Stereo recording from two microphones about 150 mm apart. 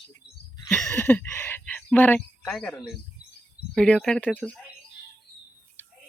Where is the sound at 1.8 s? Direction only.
10° left (ahead or behind).